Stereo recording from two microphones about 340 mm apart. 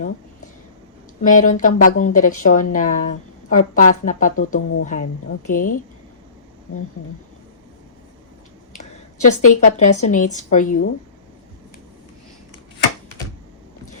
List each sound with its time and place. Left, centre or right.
1.2 s speech: left
9.2 s speech: left